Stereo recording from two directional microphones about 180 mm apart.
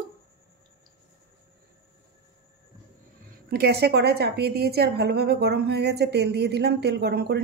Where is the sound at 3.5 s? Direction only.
65° right (ahead or behind).